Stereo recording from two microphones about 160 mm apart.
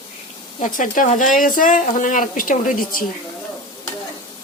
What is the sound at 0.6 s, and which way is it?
A man's voice, 55° left (ahead or behind).